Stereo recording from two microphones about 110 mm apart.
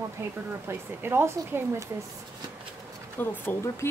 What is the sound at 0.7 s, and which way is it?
Speech, 20° right (ahead or behind).